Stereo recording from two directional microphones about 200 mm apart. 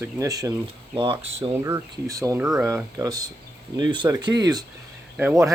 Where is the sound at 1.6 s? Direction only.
15° right (ahead or behind).